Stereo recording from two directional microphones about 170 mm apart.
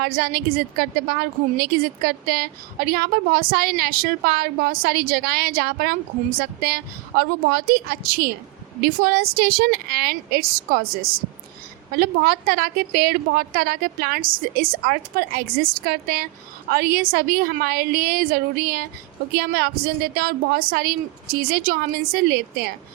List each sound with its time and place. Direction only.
0.0 s a woman's voice: 60° right (ahead or behind)